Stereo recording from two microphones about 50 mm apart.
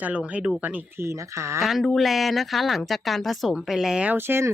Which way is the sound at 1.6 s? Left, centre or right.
Centre.